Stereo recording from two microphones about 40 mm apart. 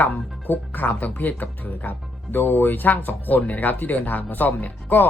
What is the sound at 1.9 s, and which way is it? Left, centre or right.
Speech, left.